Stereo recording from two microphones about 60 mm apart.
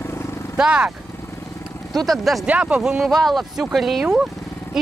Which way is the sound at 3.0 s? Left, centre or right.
Centre.